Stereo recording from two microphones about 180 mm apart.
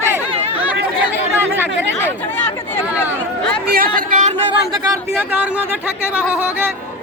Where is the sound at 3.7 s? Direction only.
55° right (ahead or behind).